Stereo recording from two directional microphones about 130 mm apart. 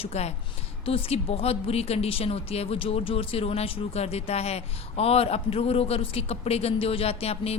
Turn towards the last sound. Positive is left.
turn(degrees=50)  # may be behind; listen again after turning